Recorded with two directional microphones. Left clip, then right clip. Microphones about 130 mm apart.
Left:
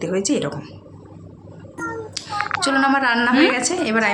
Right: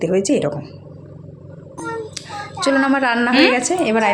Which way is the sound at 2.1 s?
30° right (ahead or behind).